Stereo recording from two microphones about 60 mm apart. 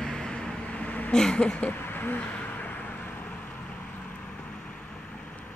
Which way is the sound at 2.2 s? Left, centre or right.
Left.